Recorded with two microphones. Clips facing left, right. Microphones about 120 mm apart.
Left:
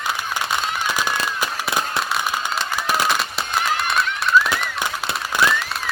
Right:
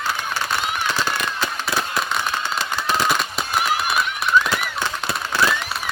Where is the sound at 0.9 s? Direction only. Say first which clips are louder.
Even; 15° left (ahead or behind).